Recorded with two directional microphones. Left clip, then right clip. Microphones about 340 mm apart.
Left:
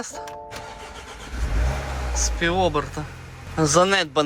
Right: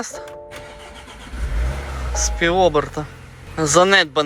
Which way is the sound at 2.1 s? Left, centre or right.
Centre.